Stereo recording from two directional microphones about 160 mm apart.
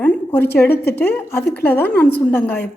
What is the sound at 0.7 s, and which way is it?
Speech, 90° left.